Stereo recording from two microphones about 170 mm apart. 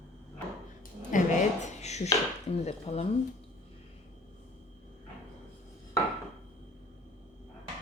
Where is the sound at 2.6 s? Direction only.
40° left (ahead or behind).